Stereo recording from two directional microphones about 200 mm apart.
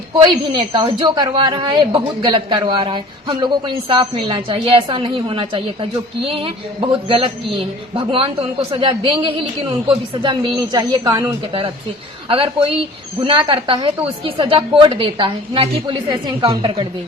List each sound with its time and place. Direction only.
0.1 s a woman's voice: 25° right (ahead or behind)